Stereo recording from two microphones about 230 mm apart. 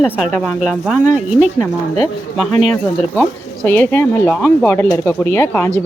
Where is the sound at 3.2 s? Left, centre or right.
Centre.